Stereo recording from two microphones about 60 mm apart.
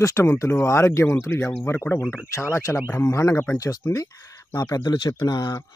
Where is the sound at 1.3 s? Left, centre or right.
Left.